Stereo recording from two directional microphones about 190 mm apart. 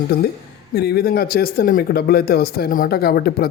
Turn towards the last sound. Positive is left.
turn(degrees=50)  # may be behind; listen again after turning